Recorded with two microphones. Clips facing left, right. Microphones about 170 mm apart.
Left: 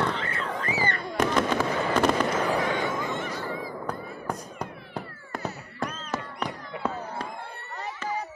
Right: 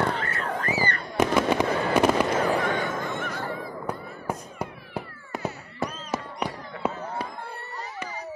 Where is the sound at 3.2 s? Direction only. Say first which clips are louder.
Even; 60° right (ahead or behind).